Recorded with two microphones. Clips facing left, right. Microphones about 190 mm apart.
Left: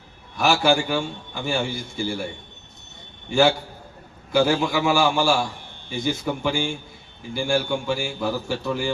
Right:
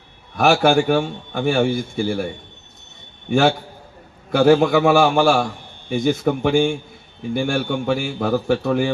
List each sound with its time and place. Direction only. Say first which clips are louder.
0.3 s a man's voice: right 5 dB; 55° right (ahead or behind)
3.2 s a man's voice: right 2 dB; 60° right (ahead or behind)